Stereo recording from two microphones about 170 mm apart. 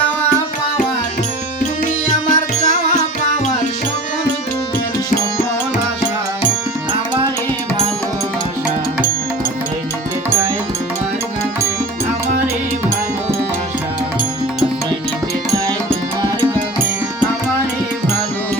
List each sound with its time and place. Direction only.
2.0 s music: 50° left (ahead or behind)